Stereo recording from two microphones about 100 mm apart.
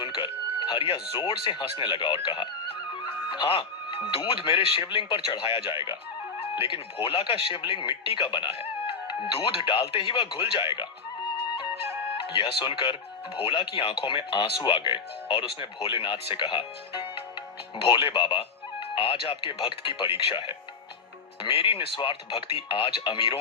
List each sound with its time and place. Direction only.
0.0 s music: 55° left (ahead or behind)
0.9 s speech: 60° left (ahead or behind)
6.4 s speech: 75° left (ahead or behind); by 10.8 s 60° left (ahead or behind)
12.1 s speech: 60° left (ahead or behind)